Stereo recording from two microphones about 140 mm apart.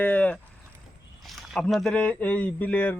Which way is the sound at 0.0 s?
10° left (ahead or behind).